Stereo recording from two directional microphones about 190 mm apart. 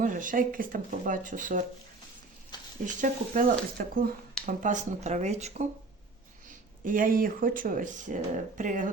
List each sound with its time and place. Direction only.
0.0 s speech: 45° right (ahead or behind)
2.8 s speech: 45° right (ahead or behind)
6.8 s speech: 45° right (ahead or behind)